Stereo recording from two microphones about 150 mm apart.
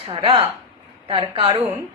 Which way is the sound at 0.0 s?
35° right (ahead or behind).